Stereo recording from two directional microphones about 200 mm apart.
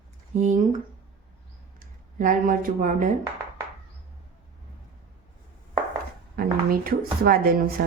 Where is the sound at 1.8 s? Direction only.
45° right (ahead or behind).